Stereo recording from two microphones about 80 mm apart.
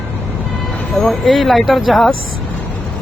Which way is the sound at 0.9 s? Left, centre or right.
Centre.